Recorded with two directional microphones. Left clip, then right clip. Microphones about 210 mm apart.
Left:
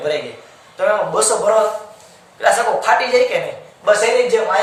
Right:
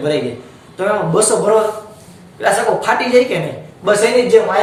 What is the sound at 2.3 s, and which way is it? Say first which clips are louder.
Speech: even; 15° left (ahead or behind).